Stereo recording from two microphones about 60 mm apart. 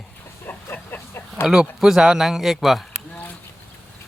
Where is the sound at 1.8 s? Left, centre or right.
Centre.